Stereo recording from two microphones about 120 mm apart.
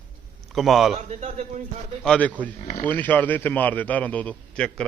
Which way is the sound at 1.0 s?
65° right (ahead or behind).